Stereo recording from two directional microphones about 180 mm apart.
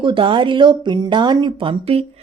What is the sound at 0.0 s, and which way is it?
Speech, 30° right (ahead or behind).